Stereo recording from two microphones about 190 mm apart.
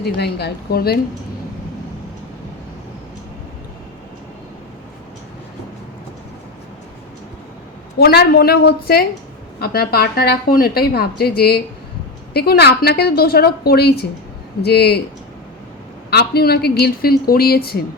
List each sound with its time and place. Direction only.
0.0 s a woman's voice: 60° left (ahead or behind)
7.9 s a woman's voice: 55° left (ahead or behind)
16.0 s a woman's voice: 55° left (ahead or behind)